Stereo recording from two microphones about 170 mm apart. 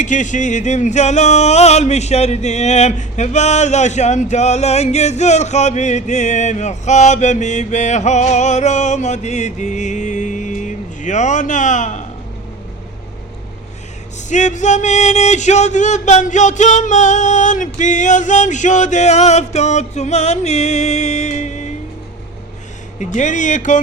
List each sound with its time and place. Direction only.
0.0 s music: 45° left (ahead or behind)
14.3 s music: 45° left (ahead or behind)
23.0 s music: 45° left (ahead or behind)